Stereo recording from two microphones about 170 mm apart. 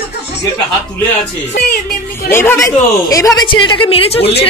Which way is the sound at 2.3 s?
15° left (ahead or behind).